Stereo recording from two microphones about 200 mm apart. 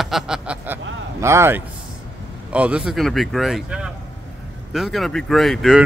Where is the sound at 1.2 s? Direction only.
15° right (ahead or behind).